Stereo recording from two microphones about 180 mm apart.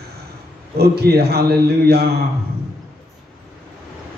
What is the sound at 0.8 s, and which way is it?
Speech, 60° right (ahead or behind).